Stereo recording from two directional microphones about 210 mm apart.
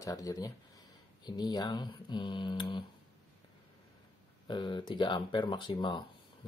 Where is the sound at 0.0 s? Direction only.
15° left (ahead or behind).